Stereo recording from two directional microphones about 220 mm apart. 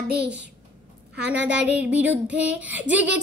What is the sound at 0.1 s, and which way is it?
Speech, 50° right (ahead or behind).